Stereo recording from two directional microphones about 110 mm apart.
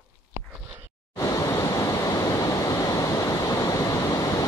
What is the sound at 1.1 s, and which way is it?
Waves, 30° left (ahead or behind).